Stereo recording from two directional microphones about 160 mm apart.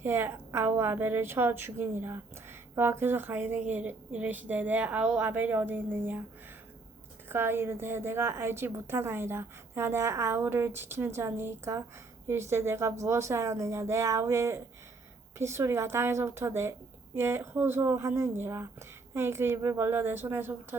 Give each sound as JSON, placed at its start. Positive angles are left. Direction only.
{"t": 0.0, "sound": "a woman's voice", "side_deg": -15}
{"t": 7.3, "sound": "a woman's voice", "side_deg": -15}